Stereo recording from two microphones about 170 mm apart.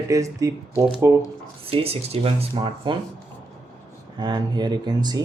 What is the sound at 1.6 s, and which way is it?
Speech, 35° right (ahead or behind).